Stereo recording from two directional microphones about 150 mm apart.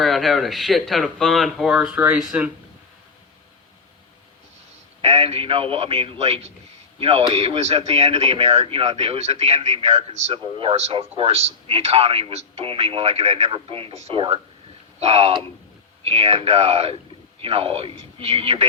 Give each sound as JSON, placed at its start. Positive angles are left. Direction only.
{"t": 0.0, "sound": "speech", "side_deg": 0}
{"t": 5.0, "sound": "speech", "side_deg": -40}